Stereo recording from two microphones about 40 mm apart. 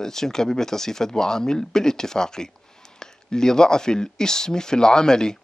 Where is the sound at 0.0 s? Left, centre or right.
Centre.